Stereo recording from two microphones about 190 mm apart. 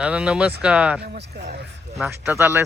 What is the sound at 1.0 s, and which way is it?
Speech, 60° right (ahead or behind).